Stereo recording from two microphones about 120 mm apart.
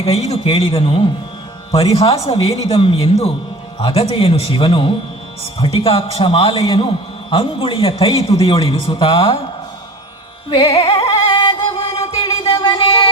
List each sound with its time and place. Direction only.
0.0 s a man's voice: 60° left (ahead or behind)
10.5 s music: 50° left (ahead or behind)